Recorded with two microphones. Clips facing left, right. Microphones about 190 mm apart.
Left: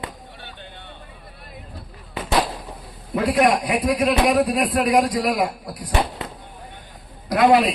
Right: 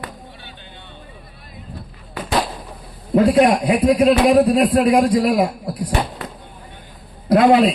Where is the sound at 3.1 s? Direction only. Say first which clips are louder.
Right 5 dB; 30° right (ahead or behind).